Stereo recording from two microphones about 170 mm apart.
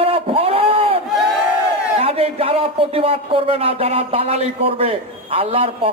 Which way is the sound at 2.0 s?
35° right (ahead or behind).